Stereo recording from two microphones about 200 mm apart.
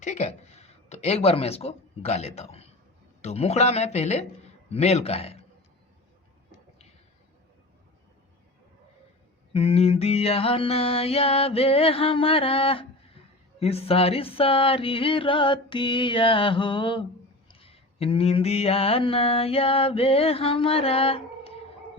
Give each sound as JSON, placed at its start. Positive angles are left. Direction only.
{"t": 0.0, "sound": "a woman's voice", "side_deg": 35}
{"t": 9.5, "sound": "mantra", "side_deg": 30}